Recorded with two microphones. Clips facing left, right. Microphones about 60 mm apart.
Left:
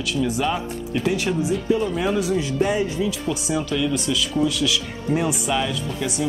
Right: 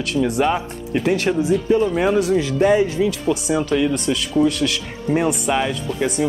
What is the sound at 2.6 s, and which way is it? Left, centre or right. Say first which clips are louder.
Speech: right 7 dB; right.